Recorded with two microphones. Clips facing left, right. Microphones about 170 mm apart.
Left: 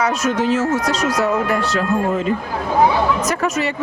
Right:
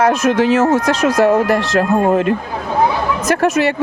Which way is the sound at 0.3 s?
75° right (ahead or behind).